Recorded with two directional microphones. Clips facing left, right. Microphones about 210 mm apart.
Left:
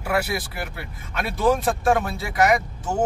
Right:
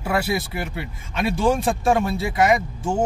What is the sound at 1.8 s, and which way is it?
Speech, 25° right (ahead or behind).